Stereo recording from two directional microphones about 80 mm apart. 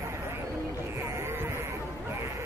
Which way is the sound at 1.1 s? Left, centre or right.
Right.